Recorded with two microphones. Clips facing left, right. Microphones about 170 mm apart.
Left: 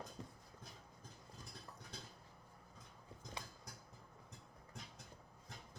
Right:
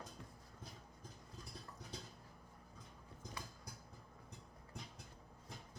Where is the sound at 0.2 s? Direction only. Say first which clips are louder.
Left 4 dB; 35° left (ahead or behind).